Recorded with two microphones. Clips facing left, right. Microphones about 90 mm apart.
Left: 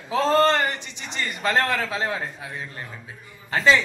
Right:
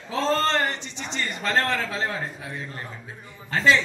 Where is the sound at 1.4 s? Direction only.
20° left (ahead or behind).